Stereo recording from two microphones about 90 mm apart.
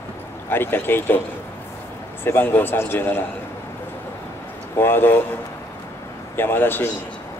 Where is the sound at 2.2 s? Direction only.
25° left (ahead or behind).